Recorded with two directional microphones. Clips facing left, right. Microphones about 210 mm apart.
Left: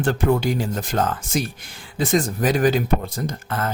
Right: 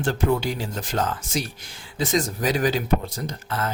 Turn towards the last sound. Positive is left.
turn(degrees=50)  # may be behind; listen again after turning